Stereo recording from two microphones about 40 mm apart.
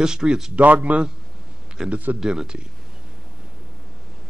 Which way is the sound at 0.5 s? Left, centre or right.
Right.